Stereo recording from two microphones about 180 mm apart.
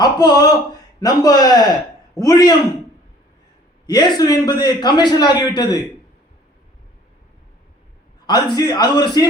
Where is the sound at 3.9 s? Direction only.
20° left (ahead or behind).